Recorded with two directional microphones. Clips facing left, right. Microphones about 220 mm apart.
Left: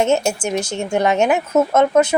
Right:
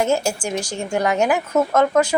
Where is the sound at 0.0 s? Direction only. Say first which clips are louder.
Left 3 dB; 25° left (ahead or behind).